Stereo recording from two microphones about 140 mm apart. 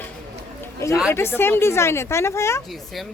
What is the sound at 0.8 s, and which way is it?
A woman's voice, 20° left (ahead or behind).